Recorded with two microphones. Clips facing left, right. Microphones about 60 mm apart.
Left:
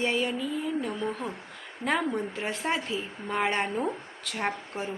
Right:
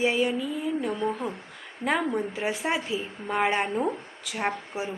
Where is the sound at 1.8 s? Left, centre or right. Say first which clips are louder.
Right 2 dB; centre.